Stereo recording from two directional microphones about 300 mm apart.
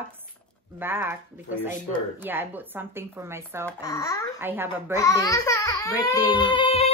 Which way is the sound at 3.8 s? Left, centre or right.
Centre.